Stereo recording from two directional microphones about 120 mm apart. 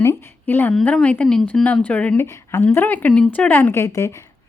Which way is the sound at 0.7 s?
5° left (ahead or behind).